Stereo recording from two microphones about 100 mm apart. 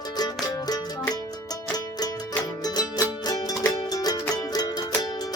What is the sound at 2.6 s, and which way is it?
Music, 40° left (ahead or behind).